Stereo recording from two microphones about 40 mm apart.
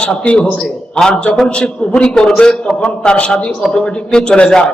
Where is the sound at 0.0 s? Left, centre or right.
Left.